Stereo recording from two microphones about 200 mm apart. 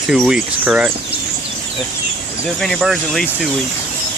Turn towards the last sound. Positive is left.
turn(degrees=0)  # may be behind; listen again after turning